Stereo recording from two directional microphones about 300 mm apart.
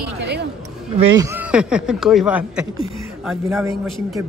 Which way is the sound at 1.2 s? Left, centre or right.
Centre.